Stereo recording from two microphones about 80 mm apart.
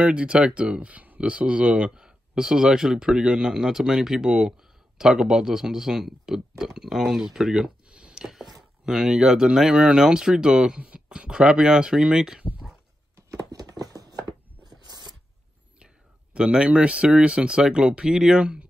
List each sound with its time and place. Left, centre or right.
0.0 s speech: centre
7.3 s a sound: centre
8.8 s speech: centre
13.5 s chopping: right
16.3 s speech: centre